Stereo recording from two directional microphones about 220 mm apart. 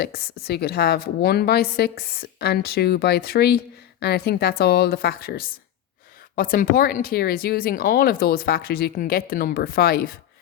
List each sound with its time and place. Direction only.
0.0 s speech: 45° left (ahead or behind)